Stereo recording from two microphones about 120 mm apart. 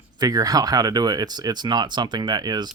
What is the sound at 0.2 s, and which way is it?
Speech, 30° right (ahead or behind).